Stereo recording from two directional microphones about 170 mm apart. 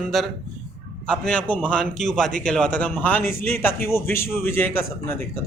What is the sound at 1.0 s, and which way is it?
A man's voice, 5° left (ahead or behind).